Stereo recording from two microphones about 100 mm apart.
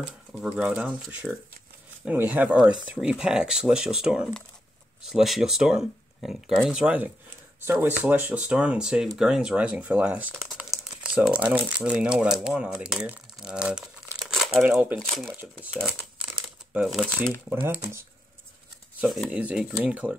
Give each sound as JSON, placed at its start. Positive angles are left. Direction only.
{"t": 0.4, "sound": "speech", "side_deg": -10}
{"t": 7.8, "sound": "speech", "side_deg": -15}
{"t": 14.3, "sound": "crumpling", "side_deg": 0}
{"t": 15.0, "sound": "speech", "side_deg": 5}
{"t": 16.7, "sound": "speech", "side_deg": -5}
{"t": 17.5, "sound": "speech", "side_deg": -20}
{"t": 19.3, "sound": "speech", "side_deg": -10}